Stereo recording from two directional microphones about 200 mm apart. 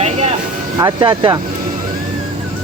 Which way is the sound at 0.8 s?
20° right (ahead or behind).